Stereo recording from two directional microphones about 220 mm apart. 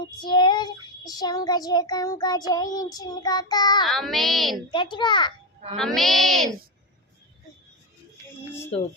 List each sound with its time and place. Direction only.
0.2 s child singing: 20° left (ahead or behind)
3.8 s a child's voice: centre (ahead or behind)
4.7 s a child's voice: 20° left (ahead or behind)
5.7 s a child's voice: centre (ahead or behind)